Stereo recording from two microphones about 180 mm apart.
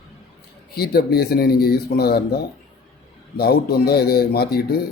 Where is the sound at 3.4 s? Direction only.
60° left (ahead or behind).